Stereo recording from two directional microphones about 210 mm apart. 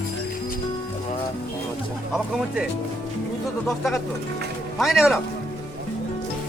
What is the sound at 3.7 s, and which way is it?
Speech, centre (ahead or behind).